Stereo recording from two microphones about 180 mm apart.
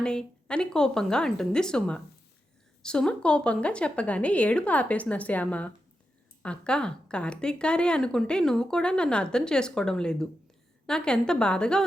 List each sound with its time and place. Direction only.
0.0 s speech: 5° left (ahead or behind)